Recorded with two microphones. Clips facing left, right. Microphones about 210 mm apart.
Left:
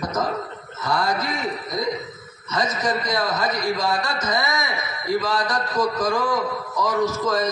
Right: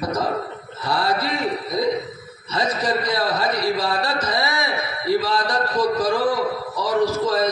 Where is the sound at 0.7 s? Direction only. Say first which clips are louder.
Right 1 dB; 30° right (ahead or behind).